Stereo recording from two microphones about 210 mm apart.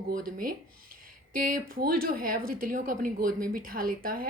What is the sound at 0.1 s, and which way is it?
Speech, 40° right (ahead or behind).